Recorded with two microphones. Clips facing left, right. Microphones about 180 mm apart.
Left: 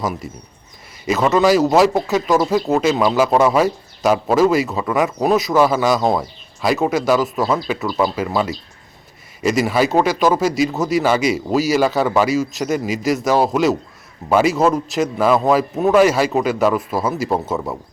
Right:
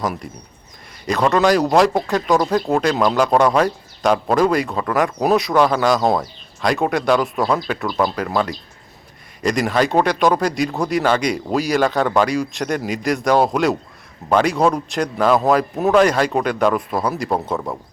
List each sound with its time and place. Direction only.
0.0 s speech: 5° left (ahead or behind)